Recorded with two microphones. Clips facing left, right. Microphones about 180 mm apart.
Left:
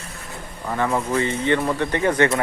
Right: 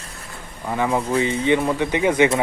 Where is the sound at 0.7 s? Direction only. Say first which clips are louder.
Right 1 dB; 10° right (ahead or behind).